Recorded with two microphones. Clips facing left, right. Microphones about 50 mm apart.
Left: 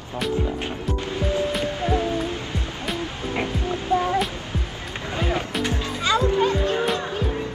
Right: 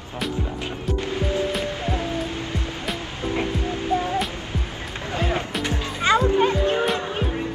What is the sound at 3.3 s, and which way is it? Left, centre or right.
Music, left.